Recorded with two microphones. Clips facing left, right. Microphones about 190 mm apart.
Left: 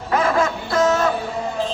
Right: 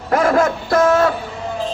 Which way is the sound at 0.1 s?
45° right (ahead or behind).